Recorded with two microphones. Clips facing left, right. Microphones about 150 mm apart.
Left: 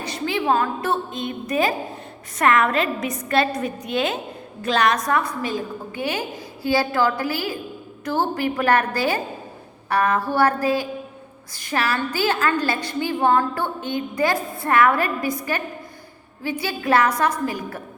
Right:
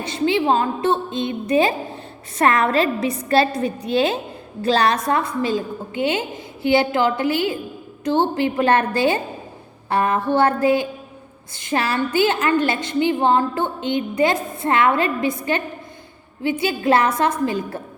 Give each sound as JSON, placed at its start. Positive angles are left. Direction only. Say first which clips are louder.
{"t": 0.0, "sound": "a woman's voice", "louder": "right 5 dB", "side_deg": -25}